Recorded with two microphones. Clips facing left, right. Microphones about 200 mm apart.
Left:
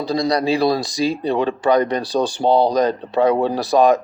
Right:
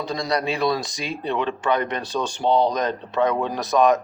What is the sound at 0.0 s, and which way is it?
Speech, 35° left (ahead or behind).